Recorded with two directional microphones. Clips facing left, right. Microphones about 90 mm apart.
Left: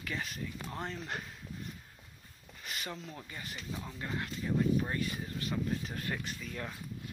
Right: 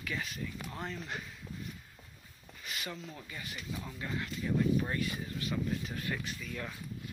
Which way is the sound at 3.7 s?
25° left (ahead or behind).